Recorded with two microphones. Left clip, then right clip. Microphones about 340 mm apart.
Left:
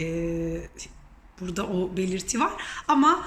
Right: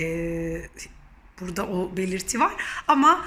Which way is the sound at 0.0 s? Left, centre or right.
Centre.